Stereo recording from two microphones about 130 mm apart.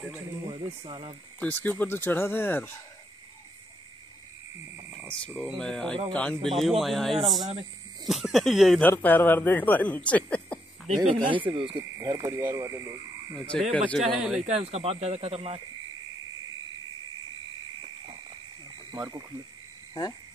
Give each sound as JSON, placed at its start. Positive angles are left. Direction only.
{"t": 0.5, "sound": "speech", "side_deg": -40}
{"t": 1.4, "sound": "speech", "side_deg": 10}
{"t": 5.4, "sound": "speech", "side_deg": 5}
{"t": 8.8, "sound": "speech", "side_deg": 15}
{"t": 11.1, "sound": "speech", "side_deg": -40}
{"t": 11.7, "sound": "speech", "side_deg": -25}
{"t": 13.5, "sound": "speech", "side_deg": 0}
{"t": 14.4, "sound": "speech", "side_deg": -55}
{"t": 18.9, "sound": "speech", "side_deg": -25}
{"t": 19.9, "sound": "speech", "side_deg": 30}